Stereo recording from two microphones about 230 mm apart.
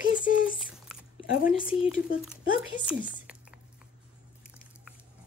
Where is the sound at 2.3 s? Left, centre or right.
Centre.